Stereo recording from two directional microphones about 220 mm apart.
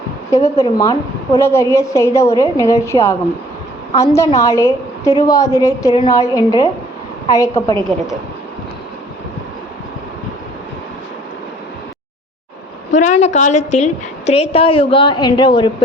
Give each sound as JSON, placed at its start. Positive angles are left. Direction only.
{"t": 0.6, "sound": "a woman's voice", "side_deg": 20}
{"t": 12.9, "sound": "a woman's voice", "side_deg": 35}